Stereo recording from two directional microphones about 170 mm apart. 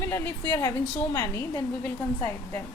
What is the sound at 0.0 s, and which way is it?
A woman's voice, 15° left (ahead or behind).